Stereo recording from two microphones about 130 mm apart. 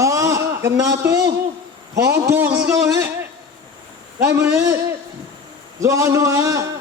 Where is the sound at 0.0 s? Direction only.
25° right (ahead or behind).